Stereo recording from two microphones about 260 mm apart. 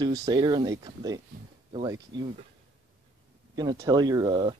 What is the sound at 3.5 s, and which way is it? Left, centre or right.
Speech, centre.